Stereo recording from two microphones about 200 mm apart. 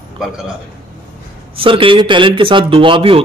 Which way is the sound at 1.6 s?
25° right (ahead or behind).